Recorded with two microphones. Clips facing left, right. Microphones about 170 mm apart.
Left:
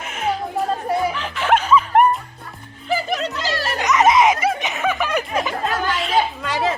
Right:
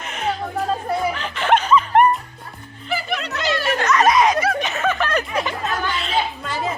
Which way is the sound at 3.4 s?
35° left (ahead or behind).